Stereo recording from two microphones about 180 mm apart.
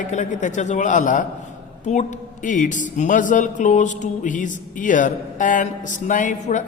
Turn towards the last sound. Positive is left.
turn(degrees=45)  # may be behind; listen again after turning